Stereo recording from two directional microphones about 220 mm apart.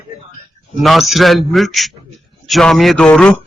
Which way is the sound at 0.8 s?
Centre (ahead or behind).